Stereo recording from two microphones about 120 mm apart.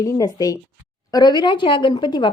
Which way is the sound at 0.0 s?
30° left (ahead or behind).